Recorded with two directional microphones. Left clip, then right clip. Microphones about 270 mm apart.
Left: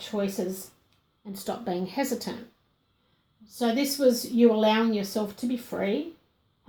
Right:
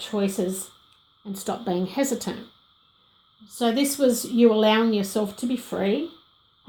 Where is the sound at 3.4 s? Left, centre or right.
Right.